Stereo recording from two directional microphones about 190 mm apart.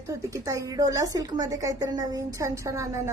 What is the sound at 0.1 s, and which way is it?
A woman's voice, 15° right (ahead or behind).